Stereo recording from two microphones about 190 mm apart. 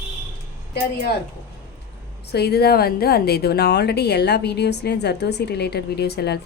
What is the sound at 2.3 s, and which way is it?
A woman's voice, 60° left (ahead or behind).